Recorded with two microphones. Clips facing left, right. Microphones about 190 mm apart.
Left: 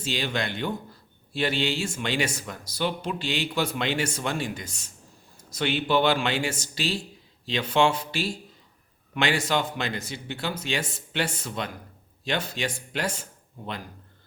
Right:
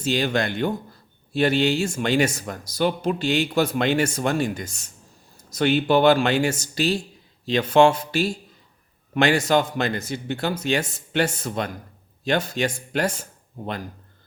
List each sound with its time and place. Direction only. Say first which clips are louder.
0.0 s speech: right 6 dB; 45° right (ahead or behind)